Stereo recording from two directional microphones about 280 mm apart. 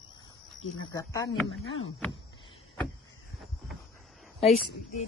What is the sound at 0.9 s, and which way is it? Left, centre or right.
Speech, centre.